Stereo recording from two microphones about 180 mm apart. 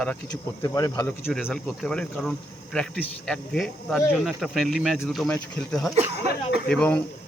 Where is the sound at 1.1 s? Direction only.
5° left (ahead or behind).